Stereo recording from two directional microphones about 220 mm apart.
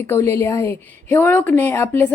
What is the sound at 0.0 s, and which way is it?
Speech, 10° left (ahead or behind).